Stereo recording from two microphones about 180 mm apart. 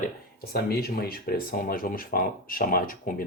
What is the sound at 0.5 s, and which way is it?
Speech, 60° left (ahead or behind).